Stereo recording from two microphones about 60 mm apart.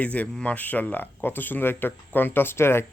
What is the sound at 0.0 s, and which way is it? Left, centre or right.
Speech, left.